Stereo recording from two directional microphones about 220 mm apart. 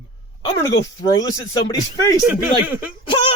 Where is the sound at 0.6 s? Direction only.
15° left (ahead or behind).